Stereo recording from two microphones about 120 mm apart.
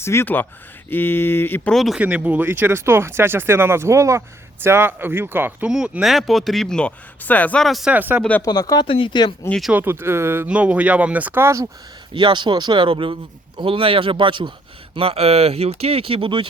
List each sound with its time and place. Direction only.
0.0 s speech: 20° left (ahead or behind)
1.7 s speech: centre (ahead or behind)
2.0 s speech: 15° right (ahead or behind)
5.7 s speech: 5° right (ahead or behind)
7.9 s speech: 15° right (ahead or behind)
8.4 s speech: 35° left (ahead or behind)
9.5 s speech: centre (ahead or behind)
9.7 s speech: 20° right (ahead or behind)
12.1 s speech: 40° right (ahead or behind)
14.9 s speech: 55° right (ahead or behind)